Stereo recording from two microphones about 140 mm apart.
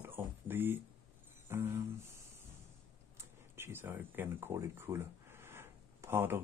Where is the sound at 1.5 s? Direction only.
15° right (ahead or behind).